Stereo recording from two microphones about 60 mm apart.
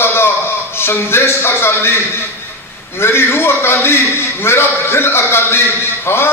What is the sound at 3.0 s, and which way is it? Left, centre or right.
A man's voice, left.